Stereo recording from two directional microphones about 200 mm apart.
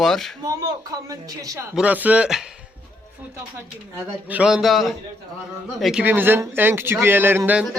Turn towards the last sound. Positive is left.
turn(degrees=-10)  # may be behind; listen again after turning